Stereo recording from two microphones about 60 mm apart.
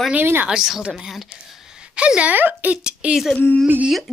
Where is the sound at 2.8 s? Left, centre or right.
Centre.